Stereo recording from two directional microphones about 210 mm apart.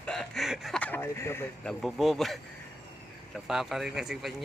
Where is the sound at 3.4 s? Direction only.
Centre (ahead or behind).